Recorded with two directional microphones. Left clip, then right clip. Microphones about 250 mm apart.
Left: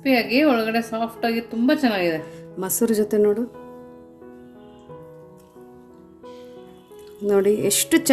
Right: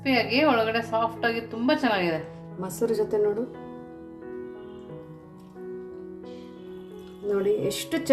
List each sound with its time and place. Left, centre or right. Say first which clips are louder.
0.0 s a woman's voice: left 4 dB; centre
2.6 s speech: left 4 dB; left
7.3 s speech: left 6 dB; left